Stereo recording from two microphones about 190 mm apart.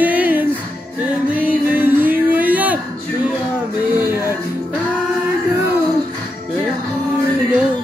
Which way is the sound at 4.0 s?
10° right (ahead or behind).